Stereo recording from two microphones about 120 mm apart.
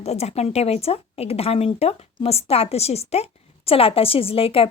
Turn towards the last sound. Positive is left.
turn(degrees=50)  # may be behind; listen again after turning